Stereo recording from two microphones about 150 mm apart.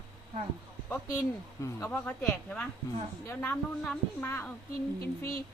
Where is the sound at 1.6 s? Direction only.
15° left (ahead or behind).